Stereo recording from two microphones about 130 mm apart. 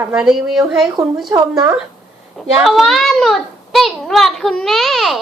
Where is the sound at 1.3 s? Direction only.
25° right (ahead or behind).